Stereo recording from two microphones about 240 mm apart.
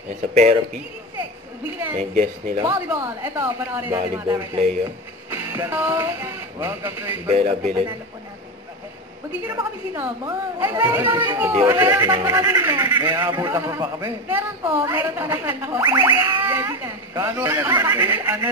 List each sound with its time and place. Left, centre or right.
0.3 s a man's voice: right
2.6 s a man's voice: centre
7.2 s a man's voice: right
9.5 s a man's voice: centre